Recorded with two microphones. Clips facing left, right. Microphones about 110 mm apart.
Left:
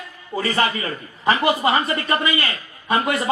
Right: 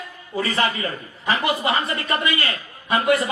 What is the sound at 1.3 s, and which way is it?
A man's voice, 40° left (ahead or behind).